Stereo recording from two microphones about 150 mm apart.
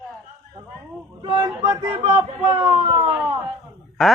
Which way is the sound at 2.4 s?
25° right (ahead or behind).